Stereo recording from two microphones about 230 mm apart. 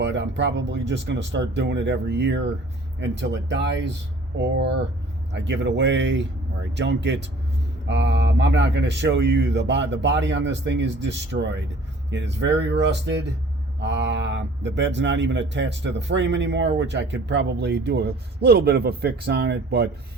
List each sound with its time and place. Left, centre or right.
0.0 s speech: right